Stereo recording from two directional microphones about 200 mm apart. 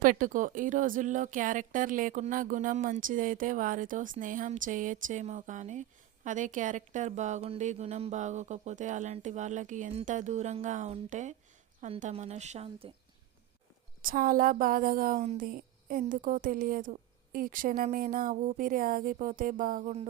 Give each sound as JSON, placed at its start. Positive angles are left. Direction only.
{"t": 0.0, "sound": "a woman's voice", "side_deg": -40}
{"t": 14.0, "sound": "a woman's voice", "side_deg": -45}